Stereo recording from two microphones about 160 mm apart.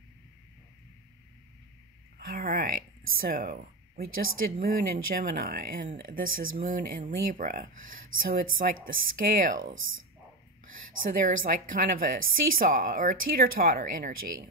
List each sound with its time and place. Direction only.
2.1 s a woman's voice: 65° right (ahead or behind)
11.0 s a woman's voice: 60° right (ahead or behind)